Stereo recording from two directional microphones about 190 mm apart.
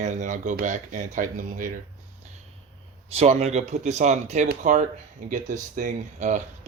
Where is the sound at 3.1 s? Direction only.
35° right (ahead or behind).